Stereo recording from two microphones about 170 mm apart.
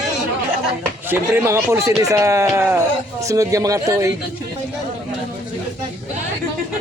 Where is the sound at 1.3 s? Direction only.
15° right (ahead or behind).